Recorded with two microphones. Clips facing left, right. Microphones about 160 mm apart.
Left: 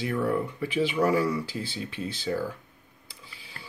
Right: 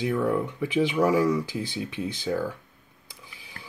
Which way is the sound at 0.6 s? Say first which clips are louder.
Right 3 dB; 15° right (ahead or behind).